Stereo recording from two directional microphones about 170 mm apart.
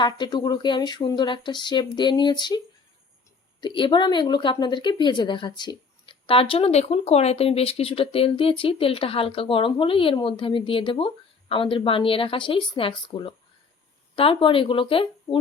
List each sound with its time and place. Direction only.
0.0 s speech: 25° left (ahead or behind)
3.6 s speech: 30° left (ahead or behind)